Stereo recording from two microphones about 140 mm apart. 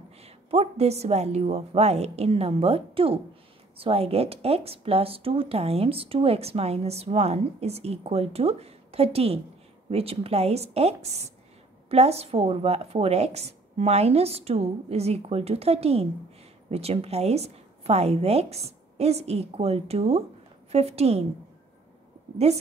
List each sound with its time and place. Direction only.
0.2 s speech: 45° right (ahead or behind)
22.5 s speech: 45° right (ahead or behind)